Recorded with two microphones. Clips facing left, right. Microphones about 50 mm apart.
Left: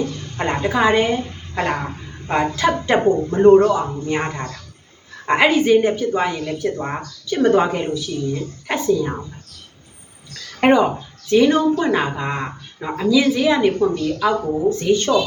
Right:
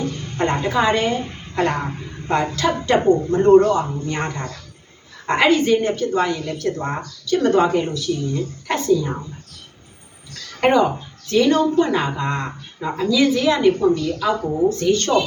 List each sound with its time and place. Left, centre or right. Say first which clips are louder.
0.3 s a woman's voice: even; centre
10.6 s a woman's voice: left 1 dB; centre